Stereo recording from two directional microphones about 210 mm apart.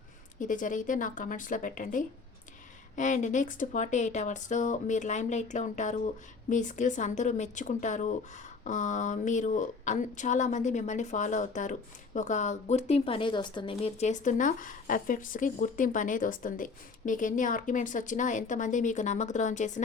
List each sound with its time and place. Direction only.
0.3 s speech: 40° left (ahead or behind)